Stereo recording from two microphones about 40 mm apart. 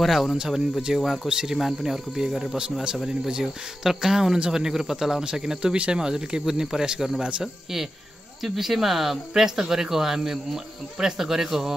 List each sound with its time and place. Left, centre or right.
0.0 s speech: centre
0.9 s speech: centre
8.4 s speech: centre